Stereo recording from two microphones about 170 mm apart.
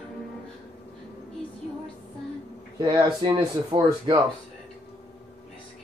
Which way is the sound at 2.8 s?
25° right (ahead or behind).